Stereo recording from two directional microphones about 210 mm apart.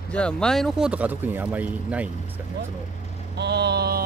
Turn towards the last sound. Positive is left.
turn(degrees=-50)  # may be behind; listen again after turning